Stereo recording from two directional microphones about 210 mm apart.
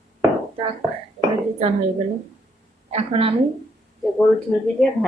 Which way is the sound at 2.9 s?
30° right (ahead or behind).